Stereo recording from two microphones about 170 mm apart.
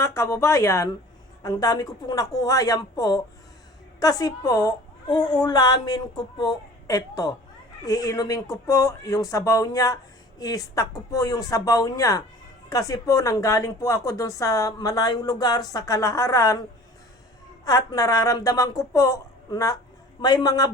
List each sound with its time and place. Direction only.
0.0 s speech: 15° left (ahead or behind)
17.7 s speech: 20° left (ahead or behind)